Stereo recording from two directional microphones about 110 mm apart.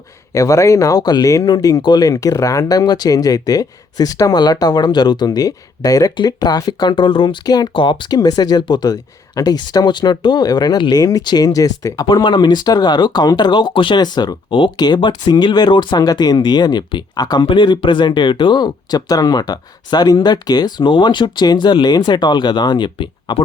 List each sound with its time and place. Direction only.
0.3 s speech: 30° left (ahead or behind)
7.7 s speech: 45° left (ahead or behind)